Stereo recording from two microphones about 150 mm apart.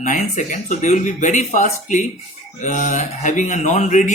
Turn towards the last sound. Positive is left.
turn(degrees=55)  # may be behind; listen again after turning